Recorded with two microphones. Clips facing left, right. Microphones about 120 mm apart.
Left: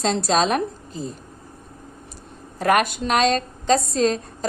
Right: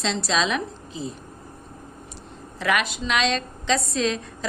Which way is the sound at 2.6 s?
50° left (ahead or behind).